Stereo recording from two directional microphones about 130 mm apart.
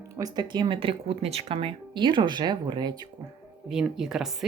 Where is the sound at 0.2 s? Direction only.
35° right (ahead or behind).